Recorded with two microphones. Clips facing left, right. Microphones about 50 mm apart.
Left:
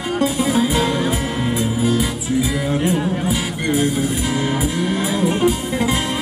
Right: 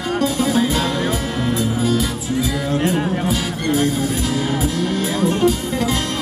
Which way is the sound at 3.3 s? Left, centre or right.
Centre.